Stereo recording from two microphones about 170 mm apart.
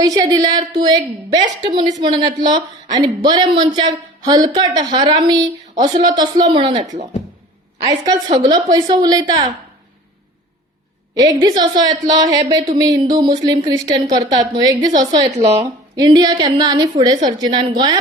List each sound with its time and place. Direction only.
0.0 s speech: 20° right (ahead or behind)
7.9 s speech: 20° right (ahead or behind)
11.1 s speech: 20° right (ahead or behind)